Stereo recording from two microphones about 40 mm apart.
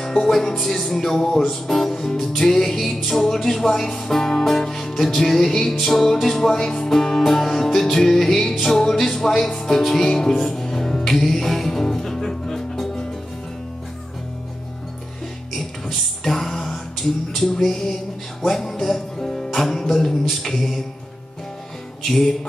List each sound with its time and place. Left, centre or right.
0.0 s music: centre
15.5 s music: centre
22.0 s music: centre